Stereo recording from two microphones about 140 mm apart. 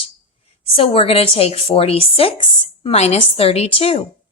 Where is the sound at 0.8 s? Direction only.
40° left (ahead or behind).